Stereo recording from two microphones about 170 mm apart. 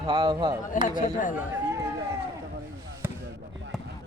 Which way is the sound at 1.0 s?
50° left (ahead or behind).